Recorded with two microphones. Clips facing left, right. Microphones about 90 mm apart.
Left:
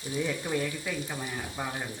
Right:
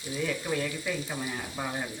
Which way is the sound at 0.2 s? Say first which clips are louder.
Even; 10° left (ahead or behind).